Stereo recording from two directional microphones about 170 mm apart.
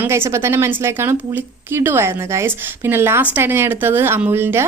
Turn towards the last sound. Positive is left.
turn(degrees=-15)  # may be behind; listen again after turning